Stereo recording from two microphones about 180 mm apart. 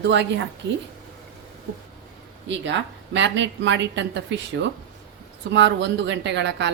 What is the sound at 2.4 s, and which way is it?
A woman's voice, 80° right.